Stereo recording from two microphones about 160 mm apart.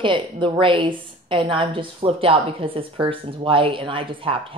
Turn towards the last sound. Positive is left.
turn(degrees=-35)  # may be behind; listen again after turning